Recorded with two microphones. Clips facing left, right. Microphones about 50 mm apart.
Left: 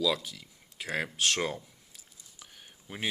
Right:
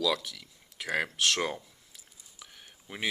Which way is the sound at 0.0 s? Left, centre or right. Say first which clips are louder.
Even; right.